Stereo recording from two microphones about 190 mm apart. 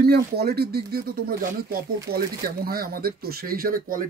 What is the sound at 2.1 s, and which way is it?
Speech, 55° right (ahead or behind).